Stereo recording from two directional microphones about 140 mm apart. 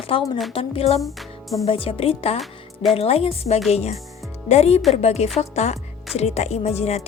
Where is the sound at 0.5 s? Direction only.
40° left (ahead or behind).